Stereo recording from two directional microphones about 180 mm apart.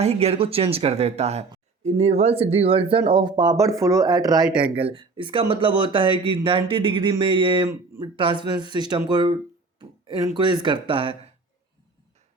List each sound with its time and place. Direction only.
0.0 s speech: 35° right (ahead or behind)